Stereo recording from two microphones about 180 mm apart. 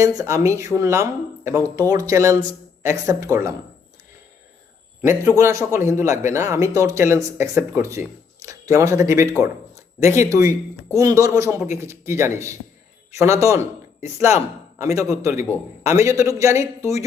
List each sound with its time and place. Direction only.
0.0 s speech: 20° right (ahead or behind)
5.4 s speech: 15° right (ahead or behind)